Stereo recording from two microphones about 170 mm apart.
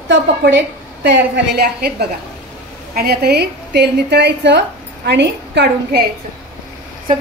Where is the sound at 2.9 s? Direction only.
65° right (ahead or behind).